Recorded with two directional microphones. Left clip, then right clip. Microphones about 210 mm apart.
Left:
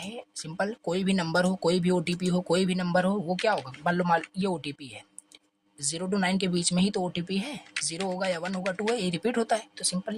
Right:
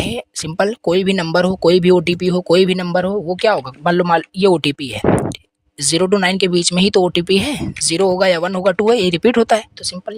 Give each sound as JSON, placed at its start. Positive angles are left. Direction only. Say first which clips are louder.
{"t": 0.0, "sound": "speech", "louder": "right 16 dB", "side_deg": -50}